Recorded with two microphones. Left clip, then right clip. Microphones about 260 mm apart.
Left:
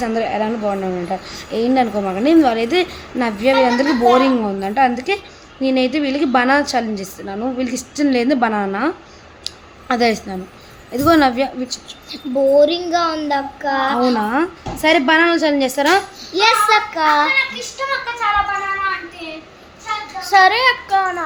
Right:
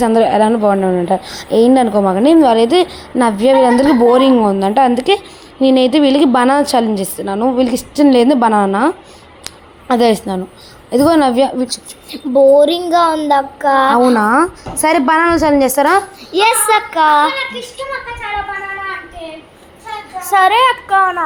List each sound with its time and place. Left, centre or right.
0.0 s a woman's voice: right
9.9 s a woman's voice: right
14.3 s a child's voice: centre
14.8 s a child's voice: centre
20.2 s a child's voice: centre